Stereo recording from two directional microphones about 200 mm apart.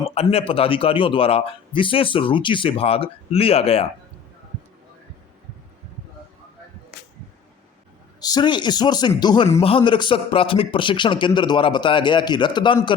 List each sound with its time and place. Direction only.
0.0 s speech: 30° left (ahead or behind)
8.2 s speech: 20° left (ahead or behind)